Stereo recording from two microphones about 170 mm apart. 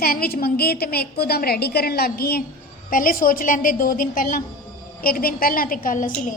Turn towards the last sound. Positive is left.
turn(degrees=50)  # may be behind; listen again after turning